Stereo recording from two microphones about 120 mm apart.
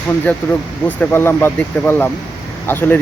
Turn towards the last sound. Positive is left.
turn(degrees=15)  # may be behind; listen again after turning